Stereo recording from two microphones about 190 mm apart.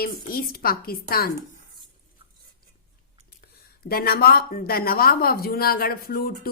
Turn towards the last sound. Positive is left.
turn(degrees=50)  # may be behind; listen again after turning